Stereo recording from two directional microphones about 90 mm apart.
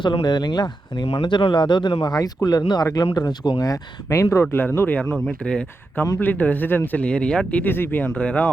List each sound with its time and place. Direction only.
0.0 s speech: 55° left (ahead or behind)
1.3 s speech: 60° left (ahead or behind)
2.0 s speech: 45° left (ahead or behind); by 4.9 s 25° left (ahead or behind)
5.1 s speech: 10° left (ahead or behind)